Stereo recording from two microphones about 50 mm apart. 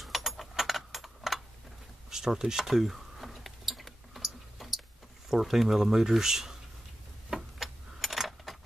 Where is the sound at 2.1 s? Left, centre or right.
Centre.